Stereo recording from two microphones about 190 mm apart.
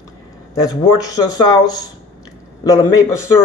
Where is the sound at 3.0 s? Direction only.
15° left (ahead or behind).